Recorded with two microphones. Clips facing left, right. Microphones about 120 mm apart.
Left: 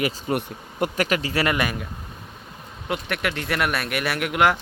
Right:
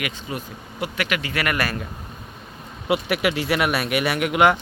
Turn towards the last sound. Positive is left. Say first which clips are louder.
# right 3 dB
turn(degrees=0)  # may be behind; listen again after turning